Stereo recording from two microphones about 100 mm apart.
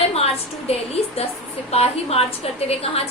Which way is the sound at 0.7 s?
90° left.